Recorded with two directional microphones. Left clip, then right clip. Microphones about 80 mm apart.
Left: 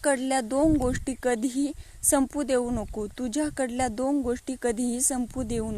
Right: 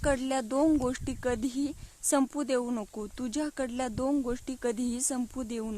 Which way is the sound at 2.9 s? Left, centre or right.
Centre.